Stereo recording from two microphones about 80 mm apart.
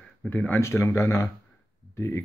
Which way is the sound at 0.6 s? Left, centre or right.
Left.